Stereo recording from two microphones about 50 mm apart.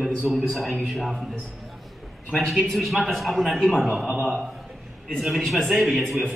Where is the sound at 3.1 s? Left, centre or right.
Centre.